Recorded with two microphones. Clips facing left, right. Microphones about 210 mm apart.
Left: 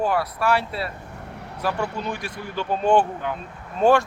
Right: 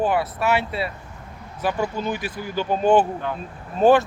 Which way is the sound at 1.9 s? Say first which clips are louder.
Right 3 dB; 5° right (ahead or behind).